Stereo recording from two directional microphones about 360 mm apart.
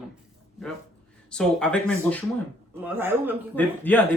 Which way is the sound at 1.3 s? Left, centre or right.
Centre.